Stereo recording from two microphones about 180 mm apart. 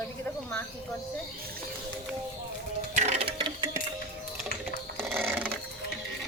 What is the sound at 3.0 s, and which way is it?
Sewing machine, 40° right (ahead or behind).